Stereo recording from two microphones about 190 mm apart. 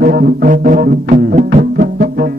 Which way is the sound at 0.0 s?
50° right (ahead or behind).